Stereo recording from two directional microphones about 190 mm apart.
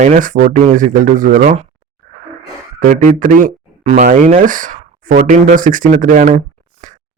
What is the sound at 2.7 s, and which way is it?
Speech, 45° right (ahead or behind).